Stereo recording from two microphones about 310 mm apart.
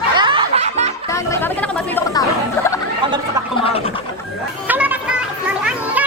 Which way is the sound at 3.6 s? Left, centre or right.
Centre.